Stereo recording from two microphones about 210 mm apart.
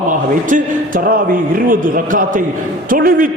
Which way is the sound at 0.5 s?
40° right (ahead or behind).